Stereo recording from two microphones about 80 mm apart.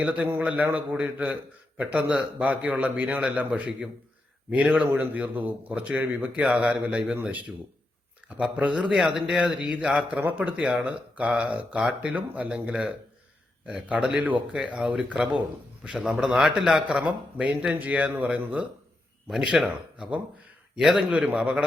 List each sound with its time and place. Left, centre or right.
0.0 s a man's voice: centre
4.9 s a man's voice: right
19.3 s a man's voice: centre